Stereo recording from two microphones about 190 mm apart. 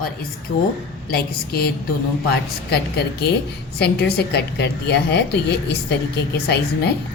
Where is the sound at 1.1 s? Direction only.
55° left (ahead or behind).